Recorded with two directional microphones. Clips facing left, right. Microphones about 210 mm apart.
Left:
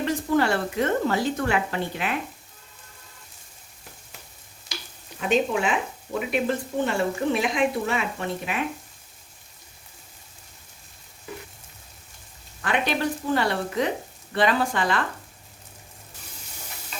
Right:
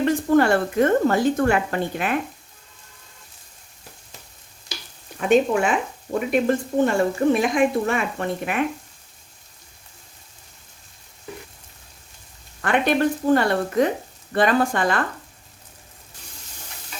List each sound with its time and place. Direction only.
0.0 s a woman's voice: 50° right (ahead or behind)
5.3 s a woman's voice: 50° right (ahead or behind)
12.6 s a woman's voice: 50° right (ahead or behind)